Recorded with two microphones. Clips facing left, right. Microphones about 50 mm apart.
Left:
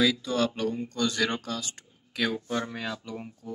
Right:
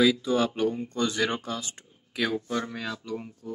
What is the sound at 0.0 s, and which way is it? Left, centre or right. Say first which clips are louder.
Speech: right 3 dB; centre.